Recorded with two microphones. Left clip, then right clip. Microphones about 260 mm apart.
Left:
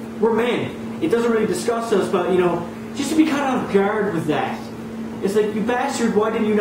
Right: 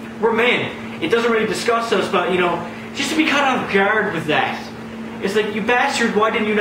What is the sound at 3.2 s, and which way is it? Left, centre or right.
A man's voice, centre.